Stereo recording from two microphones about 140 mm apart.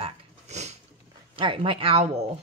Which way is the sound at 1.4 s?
40° right (ahead or behind).